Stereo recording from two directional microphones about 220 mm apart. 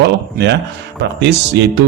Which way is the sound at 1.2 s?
50° right (ahead or behind).